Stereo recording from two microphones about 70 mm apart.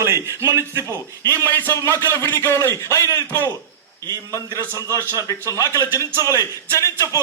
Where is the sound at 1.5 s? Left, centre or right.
Left.